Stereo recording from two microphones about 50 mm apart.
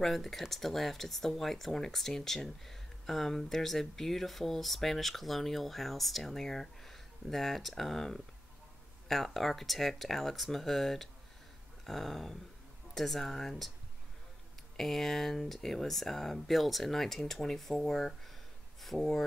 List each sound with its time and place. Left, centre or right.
0.0 s speech: centre
14.8 s speech: centre